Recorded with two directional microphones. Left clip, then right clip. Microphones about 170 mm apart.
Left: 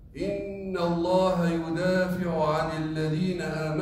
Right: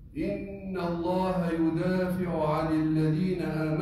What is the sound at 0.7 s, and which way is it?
Mantra, 25° left (ahead or behind).